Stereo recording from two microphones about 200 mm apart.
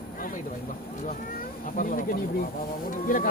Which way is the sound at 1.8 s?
40° left (ahead or behind).